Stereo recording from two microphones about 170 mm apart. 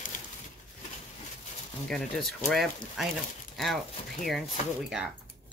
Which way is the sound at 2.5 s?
Centre (ahead or behind).